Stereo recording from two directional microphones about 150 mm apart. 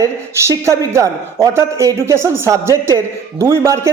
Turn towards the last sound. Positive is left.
turn(degrees=-20)  # may be behind; listen again after turning